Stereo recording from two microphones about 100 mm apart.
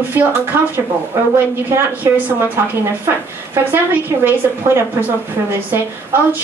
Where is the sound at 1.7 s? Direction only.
20° right (ahead or behind).